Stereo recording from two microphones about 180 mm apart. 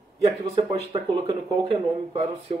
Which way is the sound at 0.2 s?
35° right (ahead or behind).